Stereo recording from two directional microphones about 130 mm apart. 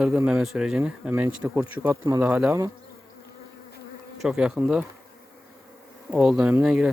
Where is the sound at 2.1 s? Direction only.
20° right (ahead or behind).